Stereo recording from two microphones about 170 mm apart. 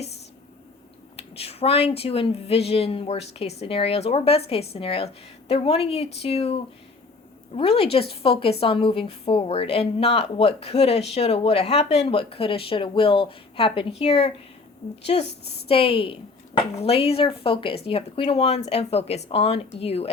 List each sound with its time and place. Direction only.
1.1 s a woman's voice: 35° left (ahead or behind)
15.3 s a woman's voice: 80° left
15.7 s a woman's voice: 35° left (ahead or behind)